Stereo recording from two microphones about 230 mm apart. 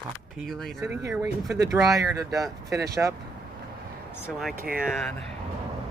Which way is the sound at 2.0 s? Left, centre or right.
Centre.